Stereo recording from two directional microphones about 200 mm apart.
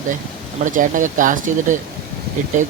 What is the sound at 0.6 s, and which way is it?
Speech, 40° right (ahead or behind).